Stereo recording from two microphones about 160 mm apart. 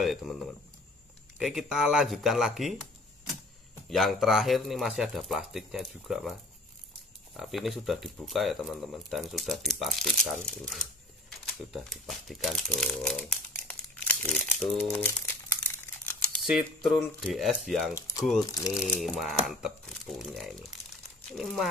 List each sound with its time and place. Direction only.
0.0 s speech: centre (ahead or behind)
1.4 s speech: centre (ahead or behind)
7.3 s speech: centre (ahead or behind)
11.2 s crumpling: centre (ahead or behind)
16.4 s speech: centre (ahead or behind)
17.9 s speech: 20° left (ahead or behind)
18.8 s speech: centre (ahead or behind)